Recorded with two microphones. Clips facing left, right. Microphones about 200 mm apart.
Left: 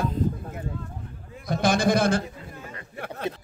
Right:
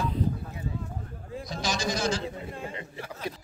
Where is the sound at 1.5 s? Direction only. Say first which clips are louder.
Left 9 dB; 55° left (ahead or behind).